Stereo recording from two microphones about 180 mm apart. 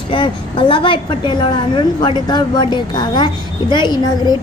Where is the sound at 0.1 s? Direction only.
30° left (ahead or behind).